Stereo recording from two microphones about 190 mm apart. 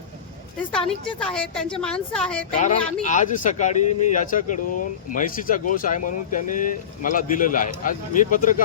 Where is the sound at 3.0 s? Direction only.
40° left (ahead or behind).